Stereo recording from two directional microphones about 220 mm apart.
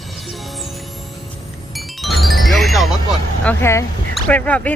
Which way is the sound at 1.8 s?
Centre (ahead or behind).